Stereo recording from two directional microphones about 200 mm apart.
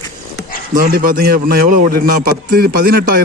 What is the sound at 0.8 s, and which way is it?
A man's voice, 45° right (ahead or behind).